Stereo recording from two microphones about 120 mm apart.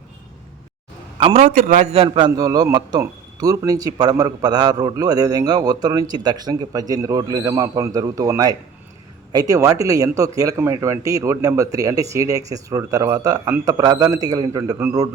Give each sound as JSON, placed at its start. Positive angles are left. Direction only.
{"t": 1.4, "sound": "a man's voice", "side_deg": -90}
{"t": 2.0, "sound": "a man's voice", "side_deg": -40}